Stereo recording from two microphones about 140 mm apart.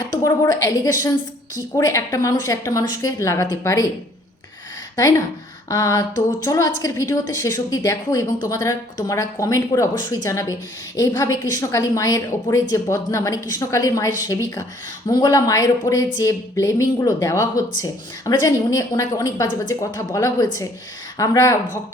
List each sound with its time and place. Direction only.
0.1 s a woman's voice: 25° left (ahead or behind)
5.6 s a woman's voice: 25° left (ahead or behind)